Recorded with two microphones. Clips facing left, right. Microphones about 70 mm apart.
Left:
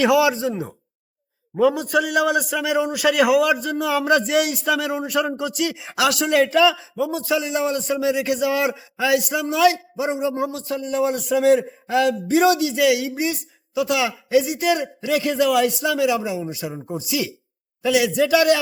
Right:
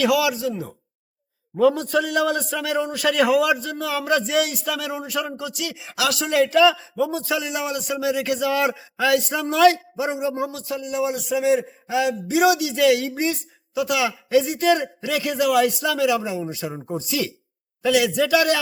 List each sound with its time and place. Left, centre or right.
0.0 s a man's voice: left
1.5 s a man's voice: centre
6.9 s a man's voice: centre
9.7 s a man's voice: left
12.4 s a man's voice: left; by 17.3 s centre
17.8 s a man's voice: left